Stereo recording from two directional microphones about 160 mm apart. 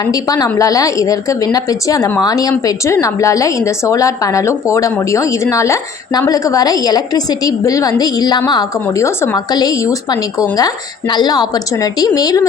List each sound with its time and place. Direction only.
0.0 s a woman's voice: 25° left (ahead or behind)